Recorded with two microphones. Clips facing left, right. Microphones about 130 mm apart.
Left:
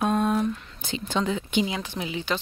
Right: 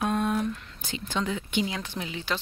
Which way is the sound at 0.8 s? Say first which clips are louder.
Left 4 dB; 25° left (ahead or behind).